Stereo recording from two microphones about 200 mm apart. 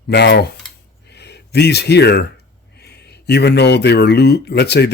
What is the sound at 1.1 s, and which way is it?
Speech, 55° left (ahead or behind).